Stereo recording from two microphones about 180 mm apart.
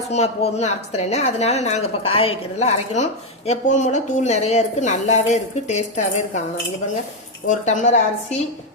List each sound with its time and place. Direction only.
0.1 s a woman's voice: 35° left (ahead or behind)
7.4 s speech: 45° left (ahead or behind)